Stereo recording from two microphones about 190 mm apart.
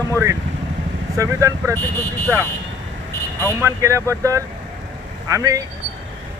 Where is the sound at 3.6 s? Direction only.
15° right (ahead or behind).